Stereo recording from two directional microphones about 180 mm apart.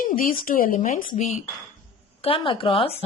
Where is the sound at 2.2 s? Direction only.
30° left (ahead or behind).